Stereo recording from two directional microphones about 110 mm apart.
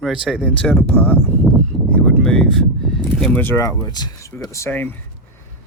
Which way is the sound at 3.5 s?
30° left (ahead or behind).